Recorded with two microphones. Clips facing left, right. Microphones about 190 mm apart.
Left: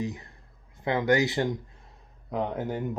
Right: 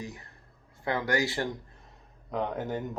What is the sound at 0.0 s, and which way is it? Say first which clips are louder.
Speech: left 8 dB; 20° left (ahead or behind).